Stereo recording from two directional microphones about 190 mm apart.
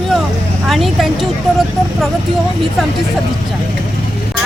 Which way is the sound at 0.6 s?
Centre (ahead or behind).